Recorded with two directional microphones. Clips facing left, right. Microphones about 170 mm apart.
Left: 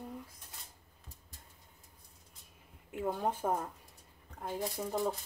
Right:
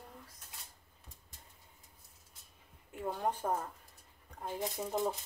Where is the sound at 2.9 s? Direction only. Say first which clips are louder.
Left 2 dB; 5° left (ahead or behind).